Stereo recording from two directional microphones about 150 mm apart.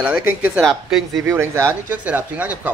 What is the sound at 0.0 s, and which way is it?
Speech, 10° right (ahead or behind).